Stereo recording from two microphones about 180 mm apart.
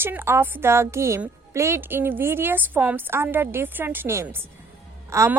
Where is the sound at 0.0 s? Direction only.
10° right (ahead or behind).